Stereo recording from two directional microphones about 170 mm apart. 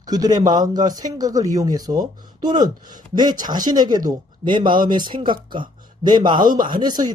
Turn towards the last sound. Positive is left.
turn(degrees=-25)  # may be behind; listen again after turning